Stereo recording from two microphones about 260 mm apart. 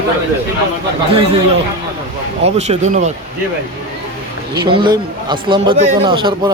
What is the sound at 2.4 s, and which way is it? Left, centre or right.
Speech, right.